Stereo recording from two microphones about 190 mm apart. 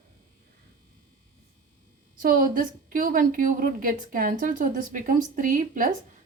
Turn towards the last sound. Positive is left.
turn(degrees=-45)  # may be behind; listen again after turning